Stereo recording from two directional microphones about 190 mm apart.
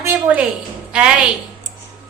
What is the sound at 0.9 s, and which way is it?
Speech, 5° right (ahead or behind).